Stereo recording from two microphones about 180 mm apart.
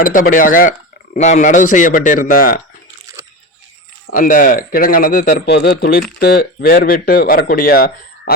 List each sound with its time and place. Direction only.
0.0 s speech: 50° left (ahead or behind)
3.2 s a sound: 15° right (ahead or behind)
4.1 s speech: 50° left (ahead or behind)